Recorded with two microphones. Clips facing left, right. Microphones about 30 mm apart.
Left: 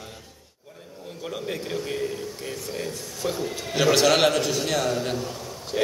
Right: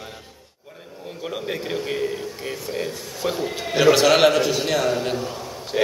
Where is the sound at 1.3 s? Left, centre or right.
Right.